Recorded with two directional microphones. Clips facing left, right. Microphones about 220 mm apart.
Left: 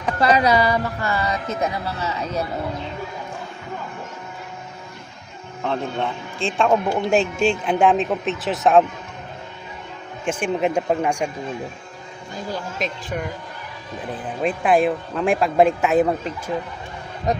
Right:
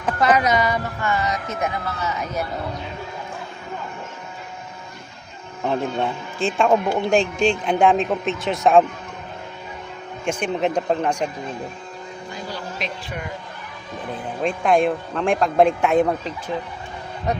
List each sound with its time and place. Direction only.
0.2 s speech: 30° left (ahead or behind)
5.6 s a man's voice: 10° right (ahead or behind)
10.2 s speech: 5° left (ahead or behind)
12.8 s speech: 45° left (ahead or behind)
14.4 s a man's voice: 5° left (ahead or behind)